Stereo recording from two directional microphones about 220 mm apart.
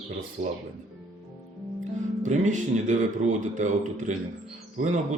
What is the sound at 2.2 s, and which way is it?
Speech, 35° right (ahead or behind).